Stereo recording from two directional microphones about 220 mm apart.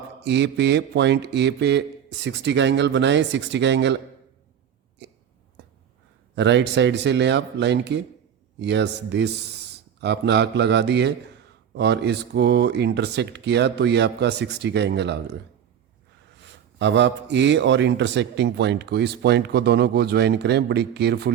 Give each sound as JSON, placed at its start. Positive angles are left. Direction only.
{"t": 0.2, "sound": "a man's voice", "side_deg": -50}
{"t": 6.3, "sound": "a man's voice", "side_deg": -55}
{"t": 16.4, "sound": "a man's voice", "side_deg": -55}